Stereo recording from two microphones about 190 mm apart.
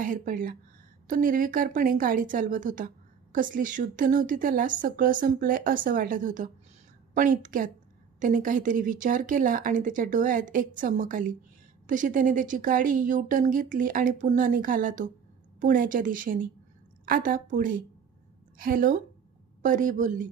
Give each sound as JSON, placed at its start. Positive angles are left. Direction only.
{"t": 0.0, "sound": "a woman's voice", "side_deg": -45}